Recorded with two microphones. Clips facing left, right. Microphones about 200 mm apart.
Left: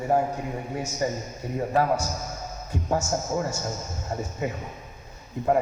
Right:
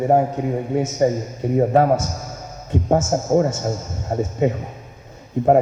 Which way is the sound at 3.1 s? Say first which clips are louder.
Right 9 dB; 45° right (ahead or behind).